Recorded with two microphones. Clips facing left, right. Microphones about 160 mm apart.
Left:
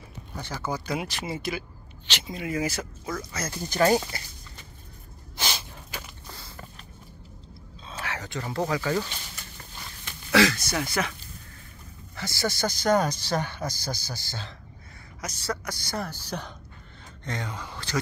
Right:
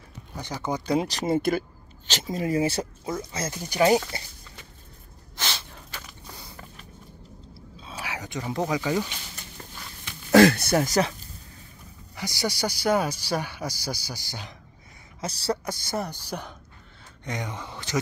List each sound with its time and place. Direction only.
0.4 s speech: 15° right (ahead or behind)
0.8 s speech: 35° right (ahead or behind)
1.3 s speech: 50° right (ahead or behind)
2.0 s speech: 40° right (ahead or behind); by 4.0 s 15° right (ahead or behind)
5.4 s gasp: 15° left (ahead or behind)
6.3 s a sound: 15° right (ahead or behind)
7.8 s a sound: 10° right (ahead or behind)
10.3 s speech: 55° right (ahead or behind)
10.9 s speech: 35° right (ahead or behind)
12.2 s speech: 15° right (ahead or behind)
15.1 s speech: 30° right (ahead or behind)